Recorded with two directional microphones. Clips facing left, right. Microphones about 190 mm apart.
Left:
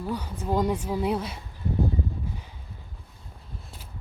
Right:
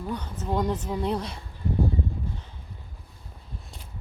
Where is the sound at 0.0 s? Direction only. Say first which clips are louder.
Left 1 dB; 10° left (ahead or behind).